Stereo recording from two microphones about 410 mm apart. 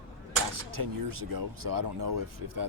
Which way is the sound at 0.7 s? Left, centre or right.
Right.